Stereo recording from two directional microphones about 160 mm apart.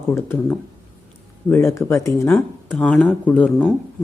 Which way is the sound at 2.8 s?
5° left (ahead or behind).